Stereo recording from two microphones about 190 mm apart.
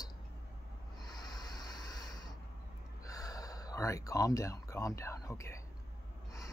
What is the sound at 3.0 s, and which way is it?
Speech, 20° left (ahead or behind).